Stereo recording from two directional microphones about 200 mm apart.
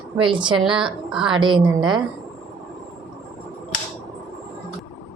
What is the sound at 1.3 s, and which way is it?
Speech, 25° right (ahead or behind).